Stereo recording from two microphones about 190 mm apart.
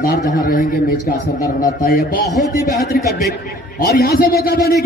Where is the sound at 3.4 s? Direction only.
60° left (ahead or behind).